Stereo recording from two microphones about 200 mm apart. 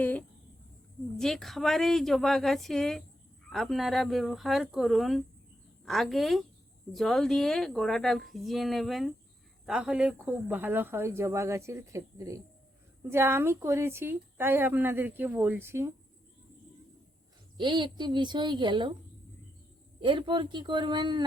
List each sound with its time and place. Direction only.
0.0 s speech: 10° left (ahead or behind); by 15.9 s 15° right (ahead or behind)
17.6 s a woman's voice: 20° right (ahead or behind)
20.0 s a woman's voice: 25° right (ahead or behind)